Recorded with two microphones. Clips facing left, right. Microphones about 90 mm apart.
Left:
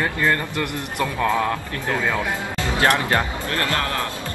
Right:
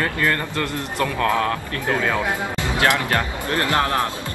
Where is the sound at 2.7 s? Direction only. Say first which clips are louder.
Left 1 dB; 20° left (ahead or behind).